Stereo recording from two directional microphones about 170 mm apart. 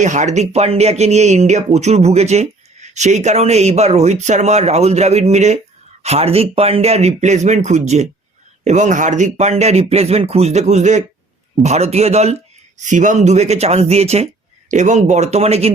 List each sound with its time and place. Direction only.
0.0 s speech: 45° right (ahead or behind)